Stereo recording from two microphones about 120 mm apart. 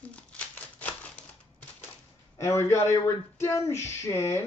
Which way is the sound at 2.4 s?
25° left (ahead or behind).